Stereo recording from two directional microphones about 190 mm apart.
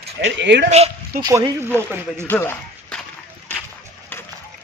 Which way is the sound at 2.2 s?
10° left (ahead or behind).